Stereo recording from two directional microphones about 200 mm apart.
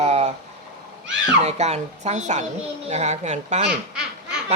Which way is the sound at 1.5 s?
35° right (ahead or behind).